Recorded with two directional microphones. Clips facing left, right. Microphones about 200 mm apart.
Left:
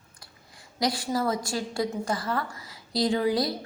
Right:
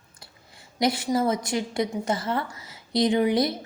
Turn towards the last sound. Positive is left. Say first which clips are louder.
# right 3 dB
turn(degrees=-20)  # may be behind; listen again after turning